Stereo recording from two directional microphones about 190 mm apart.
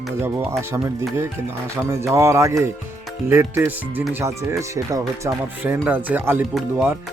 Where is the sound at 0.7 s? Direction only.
15° right (ahead or behind).